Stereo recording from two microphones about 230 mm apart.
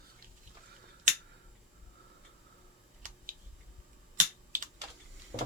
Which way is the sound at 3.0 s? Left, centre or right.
Right.